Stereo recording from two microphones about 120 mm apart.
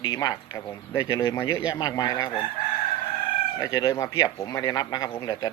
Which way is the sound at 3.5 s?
30° left (ahead or behind).